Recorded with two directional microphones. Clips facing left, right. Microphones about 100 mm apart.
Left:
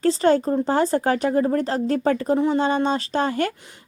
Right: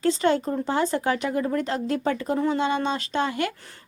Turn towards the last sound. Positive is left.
turn(degrees=40)  # may be behind; listen again after turning